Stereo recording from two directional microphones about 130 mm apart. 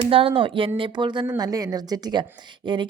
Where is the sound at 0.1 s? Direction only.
45° right (ahead or behind).